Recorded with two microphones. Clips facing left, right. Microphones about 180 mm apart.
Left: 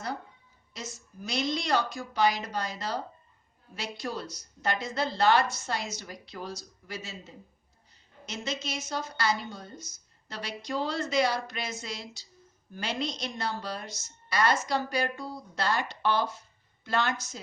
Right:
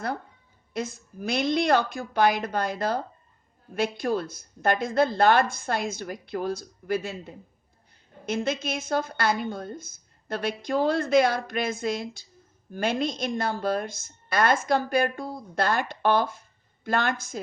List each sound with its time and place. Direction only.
0.7 s a woman's voice: 55° right (ahead or behind)